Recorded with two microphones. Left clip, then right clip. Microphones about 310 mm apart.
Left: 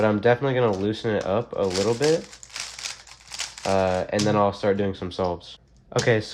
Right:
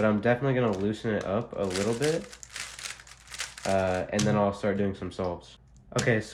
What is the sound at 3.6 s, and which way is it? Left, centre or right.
Speech, left.